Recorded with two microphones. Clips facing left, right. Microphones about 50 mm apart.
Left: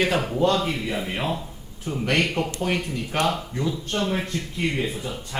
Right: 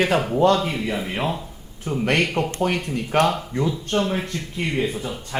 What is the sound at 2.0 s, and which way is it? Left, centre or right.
Speech, right.